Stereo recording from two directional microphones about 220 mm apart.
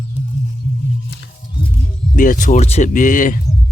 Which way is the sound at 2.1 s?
35° left (ahead or behind).